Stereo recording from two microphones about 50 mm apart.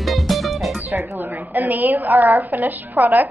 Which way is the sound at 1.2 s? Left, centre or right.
Right.